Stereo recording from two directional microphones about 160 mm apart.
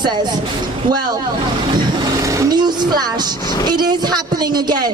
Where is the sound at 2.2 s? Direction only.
20° right (ahead or behind).